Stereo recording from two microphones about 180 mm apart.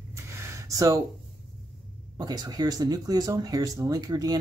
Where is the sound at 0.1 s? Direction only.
15° right (ahead or behind).